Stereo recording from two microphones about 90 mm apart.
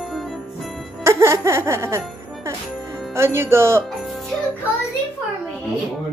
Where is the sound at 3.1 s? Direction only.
30° right (ahead or behind).